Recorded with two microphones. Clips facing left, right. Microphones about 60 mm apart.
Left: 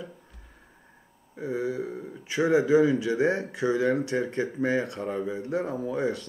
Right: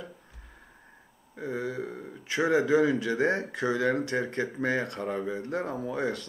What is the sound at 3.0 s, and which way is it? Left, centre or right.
Speech, right.